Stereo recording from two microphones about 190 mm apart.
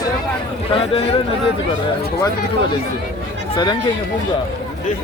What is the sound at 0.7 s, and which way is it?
Speech, 30° left (ahead or behind).